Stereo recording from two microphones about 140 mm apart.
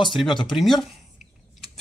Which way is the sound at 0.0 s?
Centre (ahead or behind).